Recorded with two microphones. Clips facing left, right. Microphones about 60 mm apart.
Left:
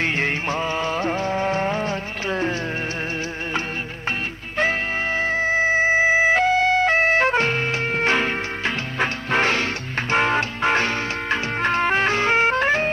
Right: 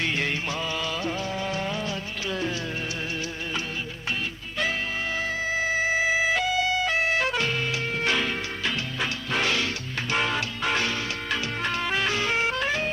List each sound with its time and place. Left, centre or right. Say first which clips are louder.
0.0 s music: left 5 dB; left
4.5 s music: left 7 dB; left